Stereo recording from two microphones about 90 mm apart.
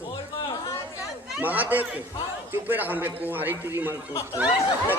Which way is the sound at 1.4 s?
20° right (ahead or behind).